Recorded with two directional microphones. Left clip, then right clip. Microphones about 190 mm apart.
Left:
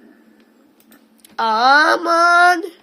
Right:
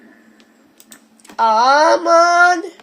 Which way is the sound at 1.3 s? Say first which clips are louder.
Right 4 dB; 40° left (ahead or behind).